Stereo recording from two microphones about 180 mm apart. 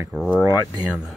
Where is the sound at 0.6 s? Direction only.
20° right (ahead or behind).